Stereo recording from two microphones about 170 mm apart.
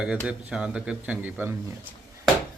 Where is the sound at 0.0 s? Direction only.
5° right (ahead or behind).